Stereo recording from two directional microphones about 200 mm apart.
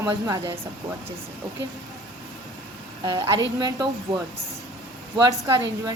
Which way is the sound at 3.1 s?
20° right (ahead or behind).